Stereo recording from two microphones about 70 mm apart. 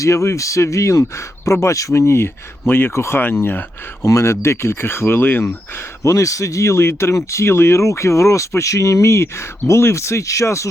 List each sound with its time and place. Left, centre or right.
0.0 s speech: left
4.0 s speech: left
6.0 s speech: left